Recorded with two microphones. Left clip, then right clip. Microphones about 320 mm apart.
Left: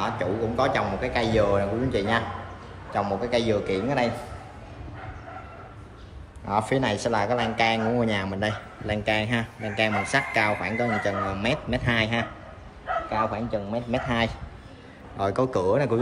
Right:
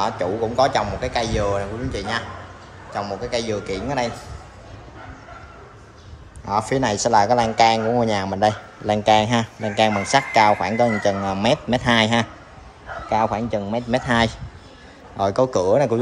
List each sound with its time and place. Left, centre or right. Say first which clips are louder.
0.0 s a man's voice: right 5 dB; centre
6.4 s speech: right 4 dB; centre; by 14.3 s right
15.1 s speech: right 6 dB; centre